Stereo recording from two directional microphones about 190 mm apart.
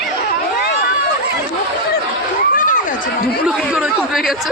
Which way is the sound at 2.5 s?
45° left (ahead or behind).